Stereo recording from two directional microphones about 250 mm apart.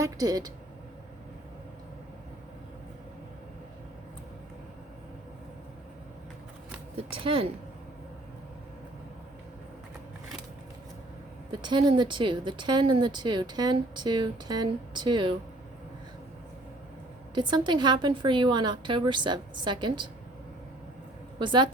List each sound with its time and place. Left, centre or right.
0.0 s a woman's voice: centre
7.3 s a woman's voice: right
11.5 s a woman's voice: centre
17.3 s a woman's voice: centre
21.3 s a woman's voice: centre